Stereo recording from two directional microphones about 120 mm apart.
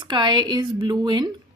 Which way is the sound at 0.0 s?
40° right (ahead or behind).